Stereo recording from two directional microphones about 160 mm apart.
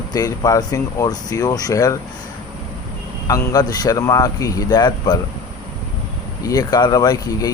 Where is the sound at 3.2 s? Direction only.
20° left (ahead or behind).